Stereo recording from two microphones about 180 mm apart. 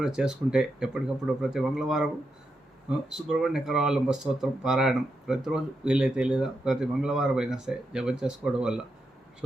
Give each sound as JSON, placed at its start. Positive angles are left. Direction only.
{"t": 0.0, "sound": "speech", "side_deg": -5}